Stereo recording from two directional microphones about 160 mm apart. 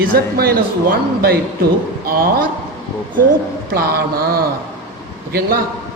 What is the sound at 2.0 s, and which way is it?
Speech, 65° right (ahead or behind).